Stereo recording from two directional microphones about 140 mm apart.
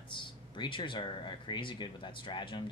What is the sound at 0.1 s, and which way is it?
Speech, 35° left (ahead or behind).